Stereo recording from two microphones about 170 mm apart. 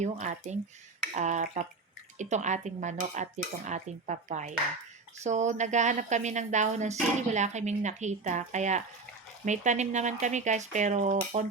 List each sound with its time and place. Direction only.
0.0 s speech: 45° right (ahead or behind)